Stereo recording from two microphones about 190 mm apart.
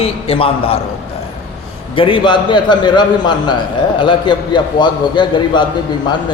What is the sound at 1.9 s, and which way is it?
A man's voice, 25° left (ahead or behind).